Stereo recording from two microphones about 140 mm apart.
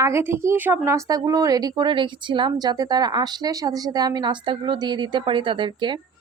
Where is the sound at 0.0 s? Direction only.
20° right (ahead or behind); by 5.9 s 35° right (ahead or behind).